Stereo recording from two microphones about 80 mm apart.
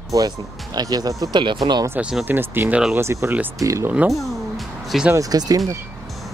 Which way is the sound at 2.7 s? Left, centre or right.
Centre.